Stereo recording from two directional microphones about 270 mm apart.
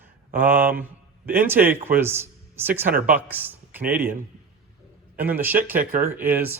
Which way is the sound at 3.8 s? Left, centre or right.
Right.